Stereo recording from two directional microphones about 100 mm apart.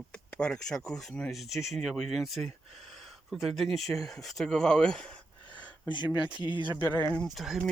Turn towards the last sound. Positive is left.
turn(degrees=-5)  # may be behind; listen again after turning